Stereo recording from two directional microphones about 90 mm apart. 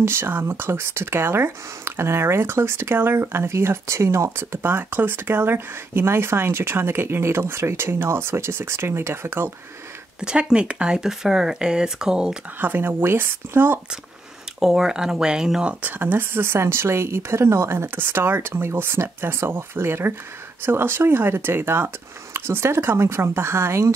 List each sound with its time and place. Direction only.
0.0 s speech: 25° right (ahead or behind)
10.2 s speech: 10° right (ahead or behind)
12.5 s speech: 25° right (ahead or behind)
14.6 s speech: 5° right (ahead or behind)
15.8 s speech: 20° right (ahead or behind)